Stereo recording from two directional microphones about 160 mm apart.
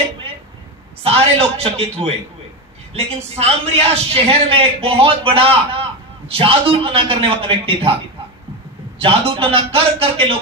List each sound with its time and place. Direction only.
1.0 s a man's voice: 40° right (ahead or behind)